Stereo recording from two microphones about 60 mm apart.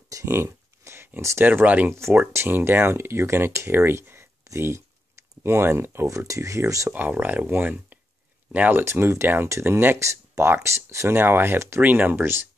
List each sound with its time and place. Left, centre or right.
0.2 s a sound: right
1.4 s speech: right
1.9 s speech: right
6.0 s speech: right
6.9 s speech: right
8.8 s speech: right
9.9 s speech: right